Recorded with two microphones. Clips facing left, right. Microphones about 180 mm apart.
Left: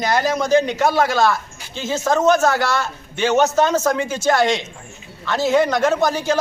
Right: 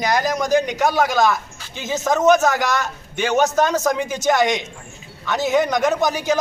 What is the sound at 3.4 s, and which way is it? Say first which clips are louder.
A man's voice: left 1 dB; 15° right (ahead or behind).